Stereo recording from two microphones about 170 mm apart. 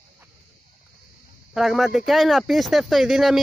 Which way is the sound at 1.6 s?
Centre (ahead or behind).